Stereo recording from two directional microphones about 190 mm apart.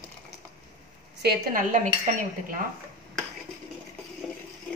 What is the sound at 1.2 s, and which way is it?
Speech, 60° right (ahead or behind).